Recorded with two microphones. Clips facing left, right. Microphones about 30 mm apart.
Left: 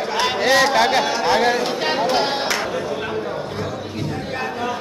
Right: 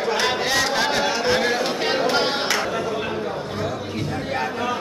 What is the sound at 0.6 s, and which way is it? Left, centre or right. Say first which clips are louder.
Speech: left 4 dB; centre.